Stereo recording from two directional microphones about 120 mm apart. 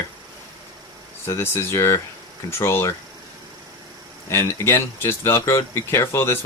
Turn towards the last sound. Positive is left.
turn(degrees=20)  # may be behind; listen again after turning